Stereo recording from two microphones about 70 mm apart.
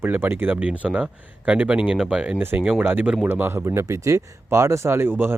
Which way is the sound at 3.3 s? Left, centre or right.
Right.